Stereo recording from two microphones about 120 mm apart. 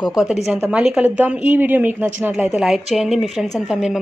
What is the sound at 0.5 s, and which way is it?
A woman's voice, 15° right (ahead or behind).